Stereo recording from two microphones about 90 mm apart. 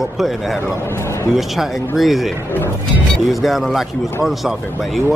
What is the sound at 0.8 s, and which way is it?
Speech, 30° left (ahead or behind).